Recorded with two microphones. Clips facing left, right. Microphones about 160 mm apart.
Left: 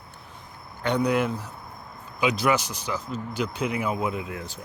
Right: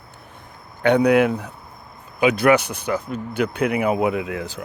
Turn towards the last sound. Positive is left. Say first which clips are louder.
# right 7 dB
turn(degrees=-90)